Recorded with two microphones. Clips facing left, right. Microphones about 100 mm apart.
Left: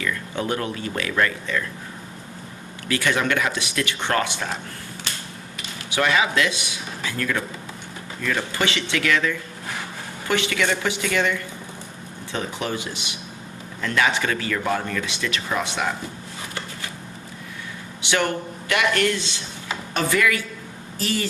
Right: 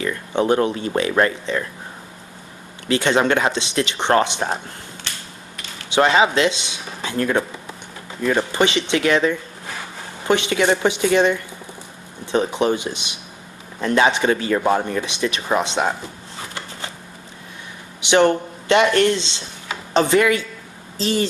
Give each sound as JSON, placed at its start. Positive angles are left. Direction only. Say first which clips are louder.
{"t": 0.0, "sound": "speech", "louder": "right 6 dB", "side_deg": -30}
{"t": 2.8, "sound": "speech", "louder": "right 5 dB", "side_deg": -25}
{"t": 5.9, "sound": "speech", "louder": "right 5 dB", "side_deg": -25}
{"t": 18.0, "sound": "speech", "louder": "right 8 dB", "side_deg": -25}